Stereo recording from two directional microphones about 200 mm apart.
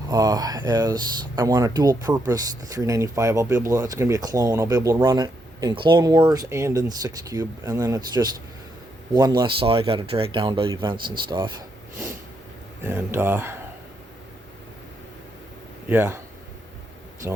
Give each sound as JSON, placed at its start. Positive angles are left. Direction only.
{"t": 0.1, "sound": "speech", "side_deg": -20}
{"t": 12.8, "sound": "speech", "side_deg": -10}
{"t": 15.9, "sound": "speech", "side_deg": -10}